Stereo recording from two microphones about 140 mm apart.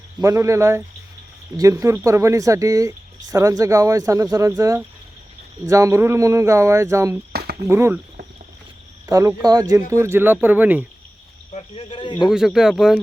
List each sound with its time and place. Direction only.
0.2 s speech: 20° right (ahead or behind)
9.0 s speech: 25° right (ahead or behind)
11.5 s speech: 45° left (ahead or behind)
12.3 s speech: centre (ahead or behind)